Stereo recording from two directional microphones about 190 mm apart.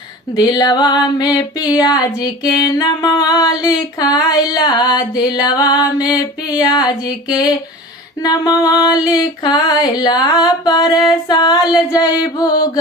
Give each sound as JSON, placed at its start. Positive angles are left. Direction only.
{"t": 0.3, "sound": "female singing", "side_deg": 20}